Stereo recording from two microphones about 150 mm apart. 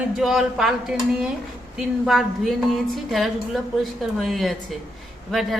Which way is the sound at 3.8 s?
Centre (ahead or behind).